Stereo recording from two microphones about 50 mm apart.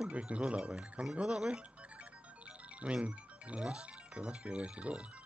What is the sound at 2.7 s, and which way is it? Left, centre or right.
Music, right.